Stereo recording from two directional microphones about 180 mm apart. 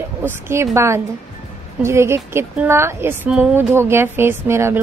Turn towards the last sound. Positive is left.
turn(degrees=-15)  # may be behind; listen again after turning